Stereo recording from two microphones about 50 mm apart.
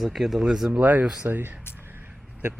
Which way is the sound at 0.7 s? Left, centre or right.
Right.